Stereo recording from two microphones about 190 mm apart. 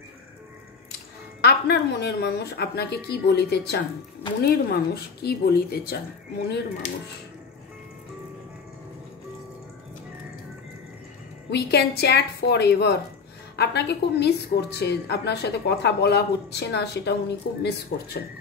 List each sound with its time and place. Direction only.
1.4 s a woman's voice: 60° left (ahead or behind)
11.5 s a woman's voice: 60° left (ahead or behind)